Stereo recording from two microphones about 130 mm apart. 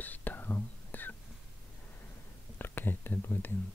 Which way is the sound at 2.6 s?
15° left (ahead or behind).